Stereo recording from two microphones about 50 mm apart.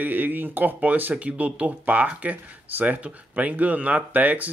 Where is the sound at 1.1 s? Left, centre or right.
Right.